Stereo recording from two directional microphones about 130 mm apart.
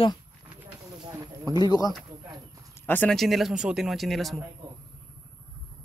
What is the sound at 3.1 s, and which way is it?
Speech, centre (ahead or behind).